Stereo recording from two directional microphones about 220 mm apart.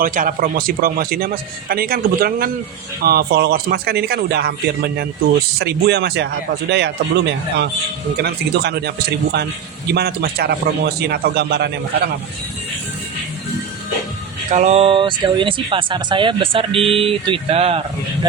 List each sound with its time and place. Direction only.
0.0 s a man's voice: 40° right (ahead or behind)
14.5 s speech: 30° right (ahead or behind)